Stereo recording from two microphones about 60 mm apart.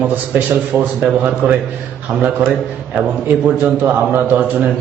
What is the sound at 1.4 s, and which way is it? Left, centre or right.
Speech, right.